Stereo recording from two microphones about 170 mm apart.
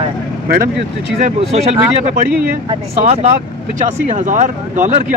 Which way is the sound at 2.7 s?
35° right (ahead or behind).